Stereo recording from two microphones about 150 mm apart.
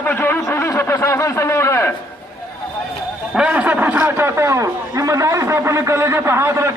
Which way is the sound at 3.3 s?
10° right (ahead or behind).